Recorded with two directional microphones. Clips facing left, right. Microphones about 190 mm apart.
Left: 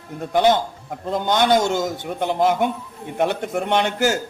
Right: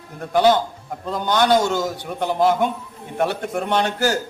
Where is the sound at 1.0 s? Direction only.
20° left (ahead or behind).